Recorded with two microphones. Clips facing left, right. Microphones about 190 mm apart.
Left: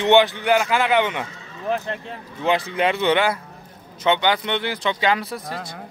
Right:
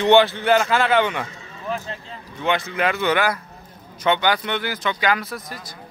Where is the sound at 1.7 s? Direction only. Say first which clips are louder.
Left 4 dB; 60° left (ahead or behind).